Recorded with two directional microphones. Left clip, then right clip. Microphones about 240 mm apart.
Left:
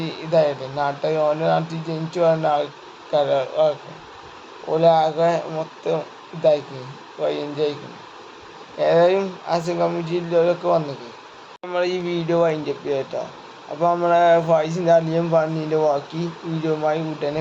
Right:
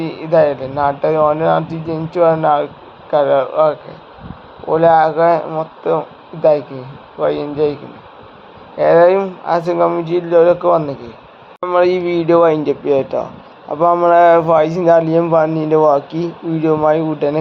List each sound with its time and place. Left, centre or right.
0.0 s a man's voice: right
7.2 s a man's voice: centre
8.8 s a man's voice: right